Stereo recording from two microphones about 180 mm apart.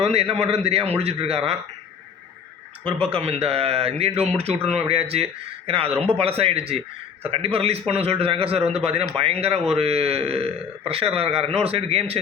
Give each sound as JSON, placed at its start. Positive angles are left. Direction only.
{"t": 0.0, "sound": "a man's voice", "side_deg": -35}
{"t": 3.1, "sound": "a man's voice", "side_deg": -35}